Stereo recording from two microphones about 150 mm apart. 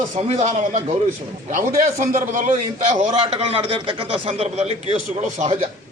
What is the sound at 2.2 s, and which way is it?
Speech, 60° right (ahead or behind).